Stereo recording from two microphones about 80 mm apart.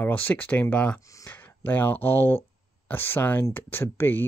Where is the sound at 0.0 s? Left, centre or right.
Left.